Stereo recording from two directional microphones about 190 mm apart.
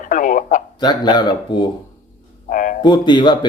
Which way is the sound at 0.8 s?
20° left (ahead or behind).